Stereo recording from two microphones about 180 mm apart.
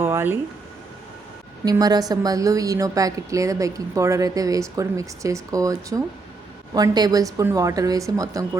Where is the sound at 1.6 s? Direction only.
20° right (ahead or behind).